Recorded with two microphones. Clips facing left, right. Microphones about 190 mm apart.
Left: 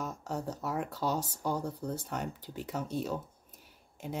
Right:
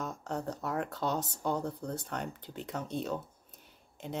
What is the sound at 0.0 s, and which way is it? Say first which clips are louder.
Speech: even; 10° left (ahead or behind).